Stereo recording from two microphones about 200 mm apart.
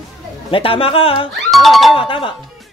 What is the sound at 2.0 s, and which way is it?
Speech, 25° left (ahead or behind).